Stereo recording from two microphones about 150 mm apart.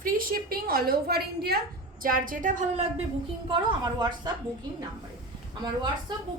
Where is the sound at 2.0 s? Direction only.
70° right (ahead or behind).